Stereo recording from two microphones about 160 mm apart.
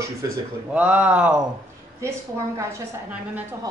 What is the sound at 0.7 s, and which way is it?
Speech, 5° right (ahead or behind).